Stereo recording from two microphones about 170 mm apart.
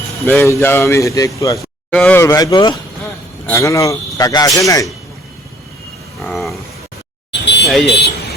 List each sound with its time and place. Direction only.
0.3 s a man's voice: 15° left (ahead or behind)
6.2 s a sound: centre (ahead or behind)
7.4 s vehicle: 90° left
7.9 s speech: 75° left (ahead or behind)